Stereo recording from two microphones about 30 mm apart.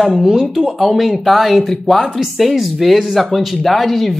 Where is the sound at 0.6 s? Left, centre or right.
Centre.